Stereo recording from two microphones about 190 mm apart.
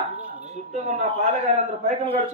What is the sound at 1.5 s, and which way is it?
Speech, 40° right (ahead or behind).